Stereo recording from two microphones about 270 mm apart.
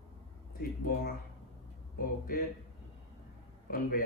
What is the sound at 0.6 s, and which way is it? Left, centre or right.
Speech, left.